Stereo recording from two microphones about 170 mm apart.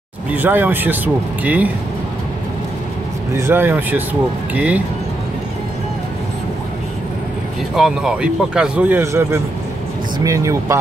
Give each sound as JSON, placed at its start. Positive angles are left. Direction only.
{"t": 0.3, "sound": "speech", "side_deg": -10}
{"t": 3.3, "sound": "speech", "side_deg": -15}
{"t": 7.7, "sound": "speech", "side_deg": -5}